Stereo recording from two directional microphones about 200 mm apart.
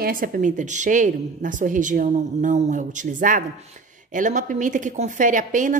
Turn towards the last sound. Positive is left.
turn(degrees=-40)  # may be behind; listen again after turning